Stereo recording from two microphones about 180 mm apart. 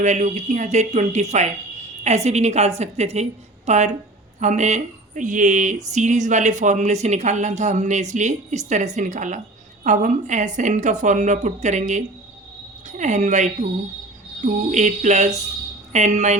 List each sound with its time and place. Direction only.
0.0 s a woman's voice: 40° right (ahead or behind)